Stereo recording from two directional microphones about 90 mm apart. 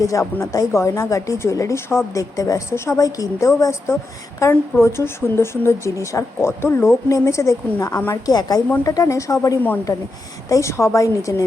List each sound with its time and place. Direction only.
0.0 s speech: 35° left (ahead or behind)
8.3 s a woman's voice: 45° left (ahead or behind)
8.8 s speech: 35° left (ahead or behind)